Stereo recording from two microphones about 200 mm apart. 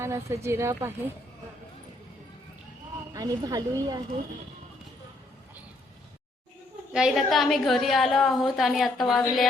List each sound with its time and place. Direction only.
0.0 s a woman's voice: 15° right (ahead or behind)
3.1 s a woman's voice: 20° right (ahead or behind)
6.9 s a woman's voice: centre (ahead or behind)